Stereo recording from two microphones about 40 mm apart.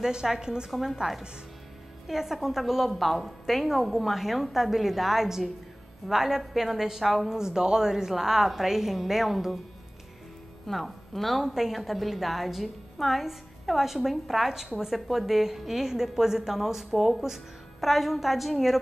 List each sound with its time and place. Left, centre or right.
0.0 s a woman's voice: centre
0.7 s a woman's voice: centre
2.0 s a woman's voice: centre
7.3 s a woman's voice: centre
10.7 s a woman's voice: centre